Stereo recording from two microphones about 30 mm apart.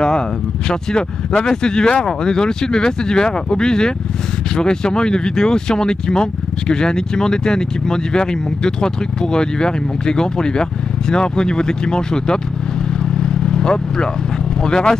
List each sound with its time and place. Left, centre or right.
0.7 s speech: left
13.0 s vehicle: left
14.6 s speech: left